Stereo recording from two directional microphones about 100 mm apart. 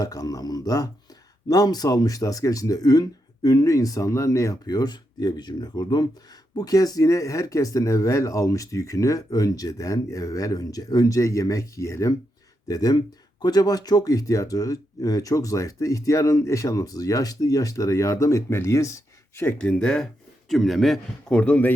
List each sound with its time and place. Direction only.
0.0 s speech: 35° left (ahead or behind)
19.5 s speech: 10° left (ahead or behind)